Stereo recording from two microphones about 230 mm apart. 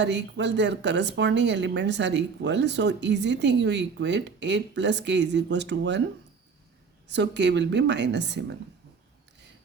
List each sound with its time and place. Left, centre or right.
0.0 s a woman's voice: right
7.1 s a woman's voice: right